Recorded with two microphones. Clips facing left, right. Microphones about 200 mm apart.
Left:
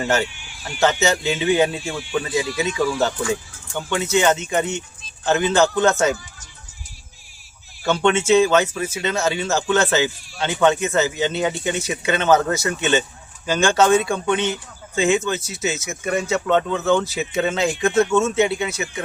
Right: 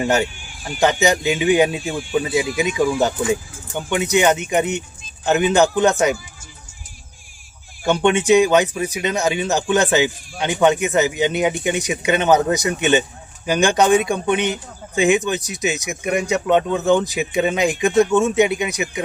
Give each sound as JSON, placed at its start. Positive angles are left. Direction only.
{"t": 0.0, "sound": "speech", "side_deg": -15}
{"t": 7.9, "sound": "speech", "side_deg": -15}